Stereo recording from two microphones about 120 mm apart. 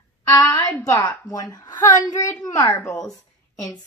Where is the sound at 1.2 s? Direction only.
30° left (ahead or behind).